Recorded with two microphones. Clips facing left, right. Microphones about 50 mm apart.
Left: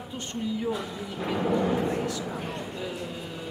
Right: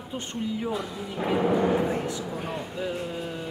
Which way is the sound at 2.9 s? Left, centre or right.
Centre.